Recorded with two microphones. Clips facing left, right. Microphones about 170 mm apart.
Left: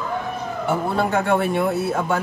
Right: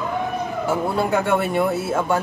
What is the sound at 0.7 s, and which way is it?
Speech, centre (ahead or behind).